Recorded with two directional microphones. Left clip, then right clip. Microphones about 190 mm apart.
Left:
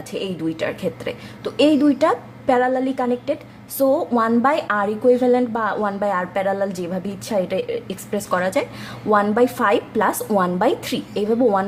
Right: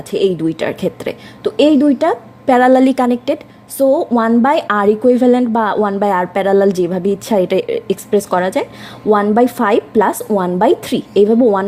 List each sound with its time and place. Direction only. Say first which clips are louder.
0.1 s a woman's voice: right 11 dB; 40° right (ahead or behind)
2.6 s a woman's voice: right 9 dB; 45° right (ahead or behind)
3.8 s a woman's voice: right 5 dB; 25° right (ahead or behind)